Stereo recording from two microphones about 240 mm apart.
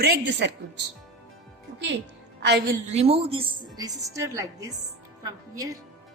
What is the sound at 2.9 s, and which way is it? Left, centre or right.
A woman's voice, right.